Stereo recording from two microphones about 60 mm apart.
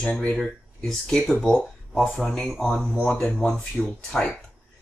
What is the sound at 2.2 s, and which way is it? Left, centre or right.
Speech, centre.